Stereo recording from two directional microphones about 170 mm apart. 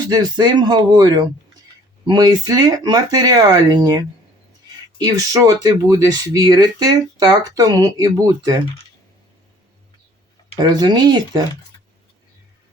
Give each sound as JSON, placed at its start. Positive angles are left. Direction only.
{"t": 0.1, "sound": "speech", "side_deg": -25}
{"t": 10.6, "sound": "speech", "side_deg": -25}